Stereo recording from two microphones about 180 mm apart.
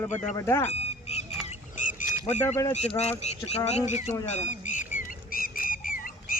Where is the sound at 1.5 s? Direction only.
45° left (ahead or behind).